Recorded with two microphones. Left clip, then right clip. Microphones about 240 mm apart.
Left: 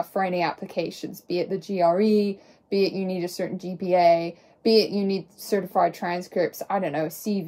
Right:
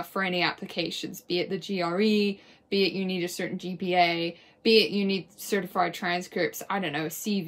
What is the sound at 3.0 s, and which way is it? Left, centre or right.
Speech, centre.